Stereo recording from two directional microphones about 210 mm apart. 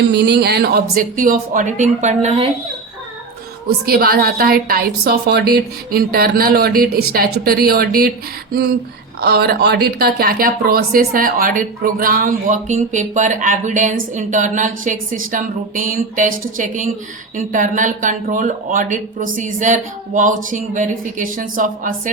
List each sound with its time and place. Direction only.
0.1 s speech: 55° right (ahead or behind); by 2.5 s 30° right (ahead or behind)
3.8 s a woman's voice: 45° right (ahead or behind)
9.2 s speech: 50° right (ahead or behind)